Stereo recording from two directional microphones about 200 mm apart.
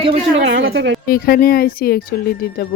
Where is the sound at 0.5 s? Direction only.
55° right (ahead or behind).